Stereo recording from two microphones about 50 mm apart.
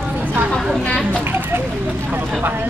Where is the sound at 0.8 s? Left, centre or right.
Centre.